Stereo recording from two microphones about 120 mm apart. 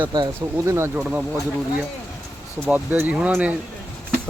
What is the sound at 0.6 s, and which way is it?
Speech, 20° right (ahead or behind).